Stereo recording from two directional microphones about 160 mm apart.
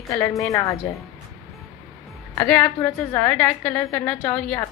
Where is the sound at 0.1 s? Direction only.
20° left (ahead or behind).